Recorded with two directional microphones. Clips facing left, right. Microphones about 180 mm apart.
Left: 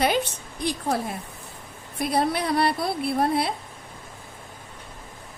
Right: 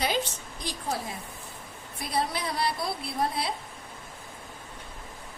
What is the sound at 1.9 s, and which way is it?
A woman's voice, 60° left (ahead or behind).